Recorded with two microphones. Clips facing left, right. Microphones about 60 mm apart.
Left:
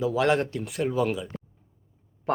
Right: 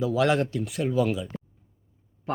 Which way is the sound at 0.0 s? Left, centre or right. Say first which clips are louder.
Even; left.